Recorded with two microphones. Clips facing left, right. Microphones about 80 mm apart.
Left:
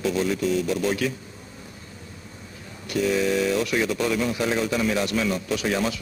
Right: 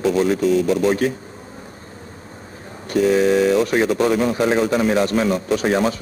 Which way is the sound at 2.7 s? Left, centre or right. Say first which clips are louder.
Right 7 dB; right.